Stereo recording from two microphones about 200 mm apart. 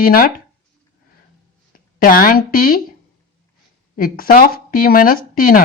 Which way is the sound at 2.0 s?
45° left (ahead or behind).